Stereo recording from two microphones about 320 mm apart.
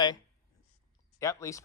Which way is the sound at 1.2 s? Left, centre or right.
Centre.